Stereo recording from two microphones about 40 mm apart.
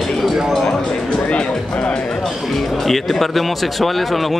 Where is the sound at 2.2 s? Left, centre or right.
Centre.